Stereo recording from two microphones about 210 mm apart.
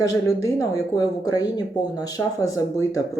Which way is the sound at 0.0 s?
15° left (ahead or behind).